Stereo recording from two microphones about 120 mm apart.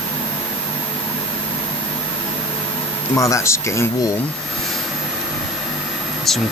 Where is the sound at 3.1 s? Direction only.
25° left (ahead or behind).